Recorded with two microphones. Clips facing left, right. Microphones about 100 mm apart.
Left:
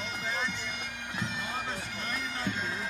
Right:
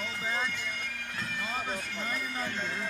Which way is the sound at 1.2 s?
20° left (ahead or behind).